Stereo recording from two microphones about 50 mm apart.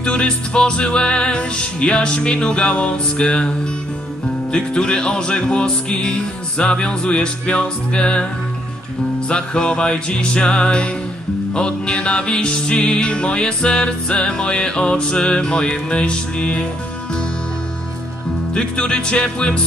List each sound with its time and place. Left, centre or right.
0.0 s music: left
4.5 s music: centre
9.3 s music: centre
18.5 s music: centre